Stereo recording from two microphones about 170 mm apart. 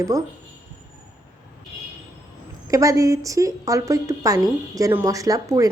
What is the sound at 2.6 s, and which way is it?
A woman's voice, 20° right (ahead or behind).